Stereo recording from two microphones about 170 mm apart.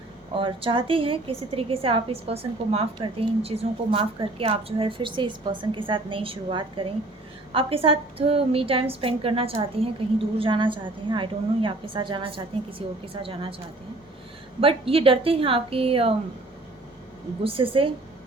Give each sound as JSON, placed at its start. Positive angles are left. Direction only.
{"t": 0.3, "sound": "a woman's voice", "side_deg": -30}
{"t": 14.6, "sound": "a woman's voice", "side_deg": -35}
{"t": 17.4, "sound": "a woman's voice", "side_deg": -30}